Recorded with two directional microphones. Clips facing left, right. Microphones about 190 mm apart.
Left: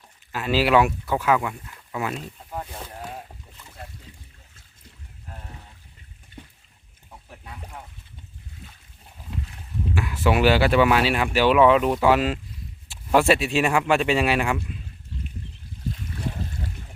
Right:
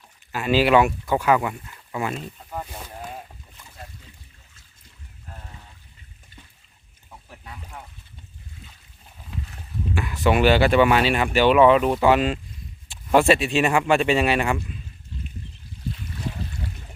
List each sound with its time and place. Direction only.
0.3 s speech: 5° right (ahead or behind)
9.9 s speech: 5° left (ahead or behind)